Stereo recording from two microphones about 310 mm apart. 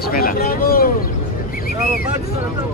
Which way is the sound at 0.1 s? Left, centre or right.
Left.